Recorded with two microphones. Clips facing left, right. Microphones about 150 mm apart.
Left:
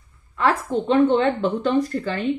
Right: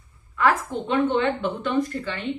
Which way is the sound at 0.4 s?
35° left (ahead or behind).